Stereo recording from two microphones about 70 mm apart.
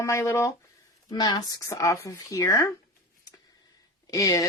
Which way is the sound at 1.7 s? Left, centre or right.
Left.